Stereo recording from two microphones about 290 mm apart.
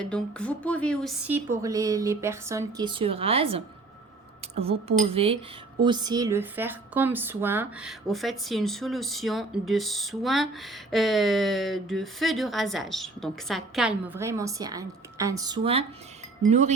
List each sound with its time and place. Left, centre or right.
0.0 s a woman's voice: centre; by 16.7 s right